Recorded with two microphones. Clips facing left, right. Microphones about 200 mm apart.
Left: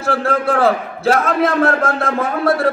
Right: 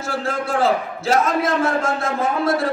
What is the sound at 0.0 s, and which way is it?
A man's voice, 60° left (ahead or behind).